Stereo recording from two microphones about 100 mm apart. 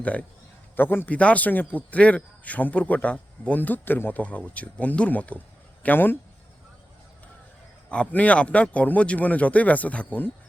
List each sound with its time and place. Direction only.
0.0 s a man's voice: 15° left (ahead or behind)
7.9 s a man's voice: 15° left (ahead or behind)